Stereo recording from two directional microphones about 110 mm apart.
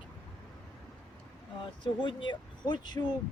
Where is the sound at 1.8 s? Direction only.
50° left (ahead or behind).